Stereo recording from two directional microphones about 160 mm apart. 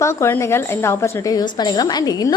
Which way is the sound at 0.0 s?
15° left (ahead or behind).